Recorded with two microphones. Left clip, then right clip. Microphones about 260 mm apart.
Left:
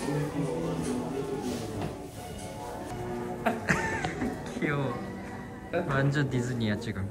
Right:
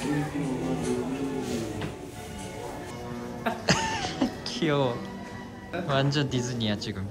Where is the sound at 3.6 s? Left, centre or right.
Centre.